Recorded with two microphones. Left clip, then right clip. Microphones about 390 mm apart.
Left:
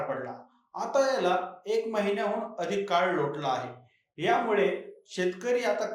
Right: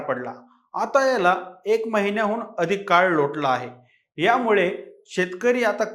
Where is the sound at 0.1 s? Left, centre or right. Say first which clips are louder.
Right 7 dB; right.